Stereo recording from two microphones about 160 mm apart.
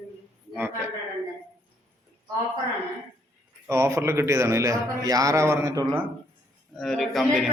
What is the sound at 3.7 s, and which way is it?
A man's voice, 15° right (ahead or behind).